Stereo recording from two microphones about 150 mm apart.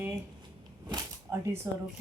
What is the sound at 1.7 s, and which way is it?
Speech, 20° right (ahead or behind).